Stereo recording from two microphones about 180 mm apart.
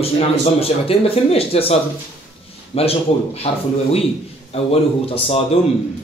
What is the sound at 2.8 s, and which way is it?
Speech, 35° left (ahead or behind).